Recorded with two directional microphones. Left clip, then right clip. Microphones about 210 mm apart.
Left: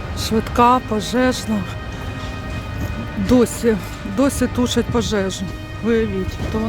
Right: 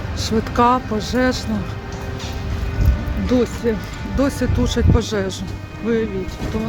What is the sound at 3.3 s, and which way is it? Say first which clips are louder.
Speech: left 3 dB; 30° left (ahead or behind).